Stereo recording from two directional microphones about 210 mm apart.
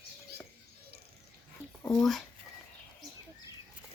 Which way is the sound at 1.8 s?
15° left (ahead or behind).